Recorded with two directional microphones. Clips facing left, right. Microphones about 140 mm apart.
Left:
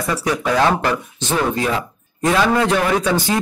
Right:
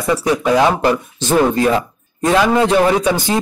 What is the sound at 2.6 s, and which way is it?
Speech, 20° right (ahead or behind).